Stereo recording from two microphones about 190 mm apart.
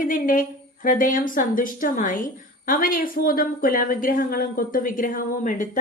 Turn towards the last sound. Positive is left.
turn(degrees=45)  # may be behind; listen again after turning